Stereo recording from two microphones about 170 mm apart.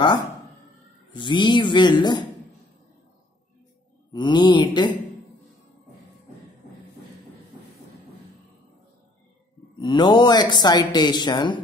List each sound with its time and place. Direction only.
1.1 s speech: 30° left (ahead or behind)
4.1 s speech: 25° left (ahead or behind)
9.8 s speech: 25° left (ahead or behind)